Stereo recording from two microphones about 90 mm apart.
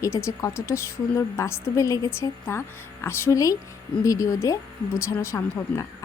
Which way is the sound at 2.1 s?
25° left (ahead or behind).